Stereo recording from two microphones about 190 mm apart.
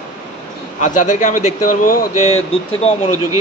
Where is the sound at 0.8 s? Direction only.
40° left (ahead or behind).